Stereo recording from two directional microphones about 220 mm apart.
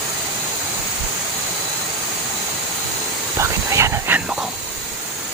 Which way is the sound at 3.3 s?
10° right (ahead or behind).